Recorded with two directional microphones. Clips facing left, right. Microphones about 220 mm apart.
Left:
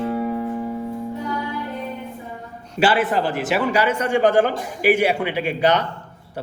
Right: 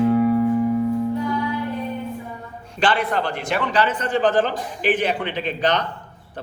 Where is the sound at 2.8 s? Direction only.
5° left (ahead or behind).